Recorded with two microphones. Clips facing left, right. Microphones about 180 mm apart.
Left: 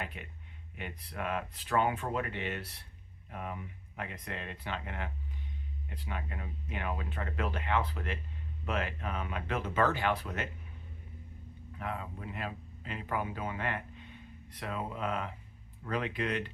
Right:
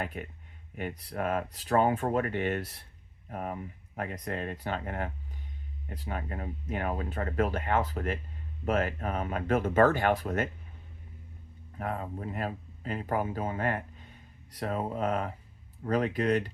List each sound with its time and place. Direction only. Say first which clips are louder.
0.0 s speech: right 6 dB; 45° right (ahead or behind)
11.8 s speech: right 5 dB; 40° right (ahead or behind)